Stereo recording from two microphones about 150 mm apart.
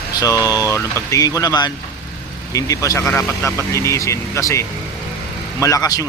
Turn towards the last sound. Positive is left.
turn(degrees=25)  # may be behind; listen again after turning